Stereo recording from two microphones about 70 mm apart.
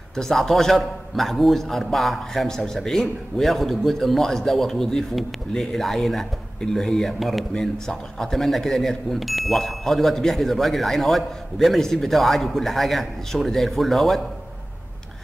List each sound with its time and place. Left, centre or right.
0.1 s a man's voice: centre